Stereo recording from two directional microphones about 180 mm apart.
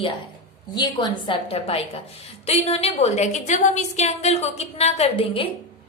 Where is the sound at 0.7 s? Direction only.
25° left (ahead or behind).